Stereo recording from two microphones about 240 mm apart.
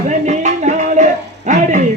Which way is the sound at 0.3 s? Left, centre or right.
Right.